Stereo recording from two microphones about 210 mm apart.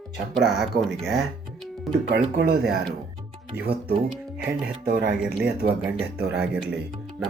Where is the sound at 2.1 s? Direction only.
50° right (ahead or behind).